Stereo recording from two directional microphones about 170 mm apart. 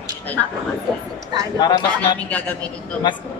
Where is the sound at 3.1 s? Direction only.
25° left (ahead or behind).